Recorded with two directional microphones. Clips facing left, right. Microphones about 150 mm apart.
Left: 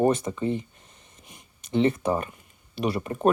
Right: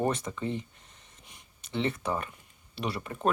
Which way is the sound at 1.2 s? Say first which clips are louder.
Left 8 dB; 10° left (ahead or behind).